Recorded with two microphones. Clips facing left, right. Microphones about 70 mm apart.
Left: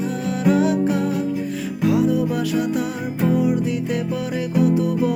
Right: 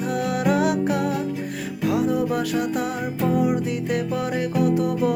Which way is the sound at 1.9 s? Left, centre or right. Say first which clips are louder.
Left 2 dB; right.